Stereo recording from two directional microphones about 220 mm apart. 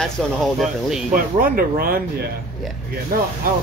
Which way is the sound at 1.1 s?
40° right (ahead or behind).